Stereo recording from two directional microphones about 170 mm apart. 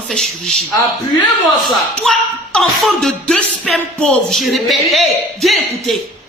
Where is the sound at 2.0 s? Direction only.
Centre (ahead or behind).